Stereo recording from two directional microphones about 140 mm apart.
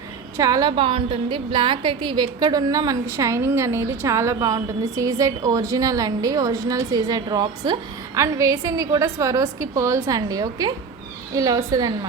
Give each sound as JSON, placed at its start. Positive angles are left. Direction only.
{"t": 0.3, "sound": "a woman's voice", "side_deg": -25}
{"t": 0.8, "sound": "a woman's voice", "side_deg": -40}